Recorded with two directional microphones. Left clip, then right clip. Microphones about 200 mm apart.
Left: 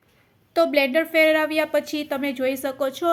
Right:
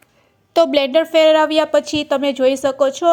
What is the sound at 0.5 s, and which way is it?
A woman's voice, 30° right (ahead or behind).